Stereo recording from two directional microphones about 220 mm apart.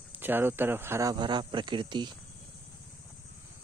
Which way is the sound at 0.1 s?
10° right (ahead or behind).